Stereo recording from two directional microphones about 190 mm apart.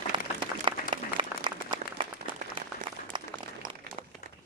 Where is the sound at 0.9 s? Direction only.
25° right (ahead or behind).